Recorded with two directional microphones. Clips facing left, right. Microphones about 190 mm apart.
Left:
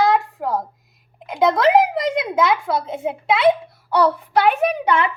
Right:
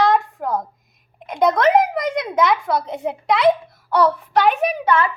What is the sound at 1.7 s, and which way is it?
Speech, 25° left (ahead or behind).